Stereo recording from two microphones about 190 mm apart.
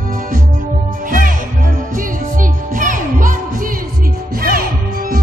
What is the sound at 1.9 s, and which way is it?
Music, 45° right (ahead or behind).